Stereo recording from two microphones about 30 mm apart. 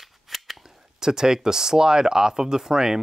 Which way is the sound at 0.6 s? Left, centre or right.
Centre.